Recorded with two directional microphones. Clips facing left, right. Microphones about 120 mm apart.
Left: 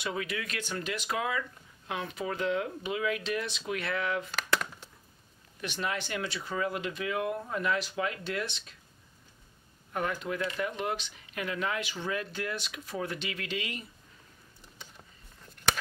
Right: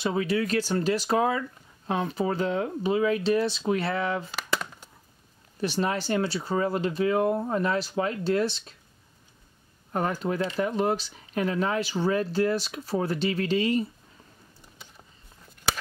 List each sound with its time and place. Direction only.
0.0 s speech: 30° right (ahead or behind)
4.3 s a sound: 5° right (ahead or behind)
5.6 s speech: 35° right (ahead or behind)
9.9 s speech: 35° right (ahead or behind)